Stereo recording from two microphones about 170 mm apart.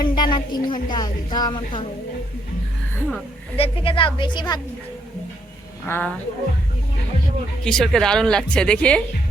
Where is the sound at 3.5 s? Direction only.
35° left (ahead or behind).